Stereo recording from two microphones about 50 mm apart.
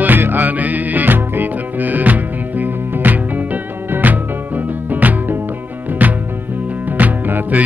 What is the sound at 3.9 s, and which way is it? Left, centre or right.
Music, right.